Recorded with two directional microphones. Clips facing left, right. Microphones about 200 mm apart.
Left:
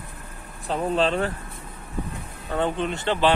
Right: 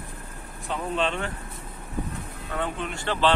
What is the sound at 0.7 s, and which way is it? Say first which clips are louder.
Speech: left 5 dB; 35° left (ahead or behind).